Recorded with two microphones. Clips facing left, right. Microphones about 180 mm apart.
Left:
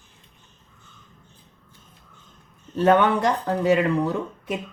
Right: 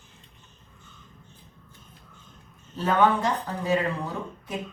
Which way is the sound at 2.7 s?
75° left (ahead or behind).